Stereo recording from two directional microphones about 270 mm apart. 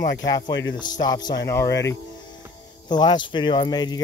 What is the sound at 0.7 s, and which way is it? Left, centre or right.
Speech, centre.